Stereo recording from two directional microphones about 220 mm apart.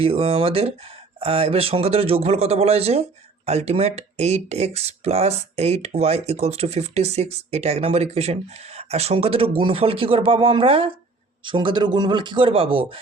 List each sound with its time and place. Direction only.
0.0 s speech: 25° right (ahead or behind)